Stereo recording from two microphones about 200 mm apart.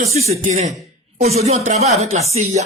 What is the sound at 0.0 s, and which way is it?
Speech, 30° right (ahead or behind).